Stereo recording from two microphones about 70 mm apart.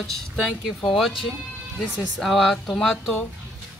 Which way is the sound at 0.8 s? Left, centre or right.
Centre.